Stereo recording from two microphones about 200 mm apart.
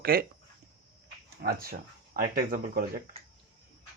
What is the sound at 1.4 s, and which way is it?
Speech, 50° right (ahead or behind).